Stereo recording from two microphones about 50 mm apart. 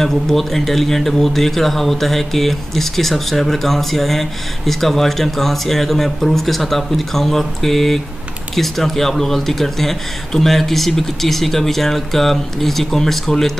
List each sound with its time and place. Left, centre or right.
0.0 s speech: centre